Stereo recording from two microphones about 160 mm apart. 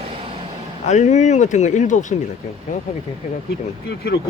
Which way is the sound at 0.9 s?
45° left (ahead or behind).